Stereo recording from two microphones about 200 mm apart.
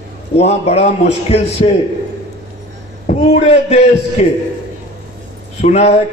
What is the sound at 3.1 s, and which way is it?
A man's voice, 30° left (ahead or behind).